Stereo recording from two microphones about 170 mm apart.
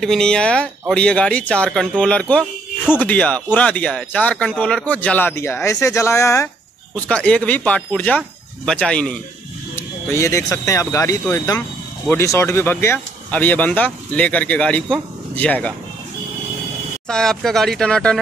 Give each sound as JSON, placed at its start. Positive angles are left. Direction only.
{"t": 0.0, "sound": "speech", "side_deg": 5}
{"t": 9.8, "sound": "speech", "side_deg": 15}
{"t": 17.1, "sound": "speech", "side_deg": 5}